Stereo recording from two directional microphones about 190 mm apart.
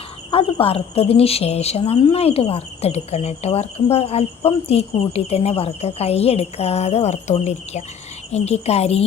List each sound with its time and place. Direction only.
0.3 s a woman's voice: 30° left (ahead or behind)